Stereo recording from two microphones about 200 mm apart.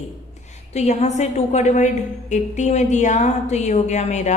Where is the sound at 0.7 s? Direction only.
35° left (ahead or behind).